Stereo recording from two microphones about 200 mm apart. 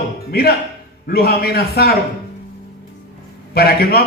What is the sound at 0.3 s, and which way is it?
A man's voice, 50° left (ahead or behind).